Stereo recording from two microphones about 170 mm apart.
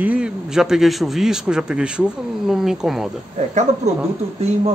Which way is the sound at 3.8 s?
40° right (ahead or behind).